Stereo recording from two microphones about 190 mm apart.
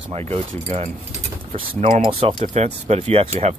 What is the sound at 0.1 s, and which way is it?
Speech, 35° right (ahead or behind).